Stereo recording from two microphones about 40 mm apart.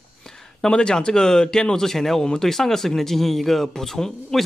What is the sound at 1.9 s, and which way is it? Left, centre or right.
Speech, centre.